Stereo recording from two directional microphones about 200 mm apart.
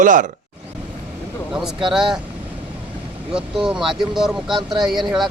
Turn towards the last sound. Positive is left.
turn(degrees=0)  # may be behind; listen again after turning